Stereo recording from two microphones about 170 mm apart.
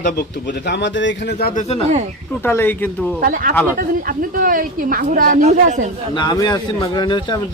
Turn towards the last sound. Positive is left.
turn(degrees=25)  # may be behind; listen again after turning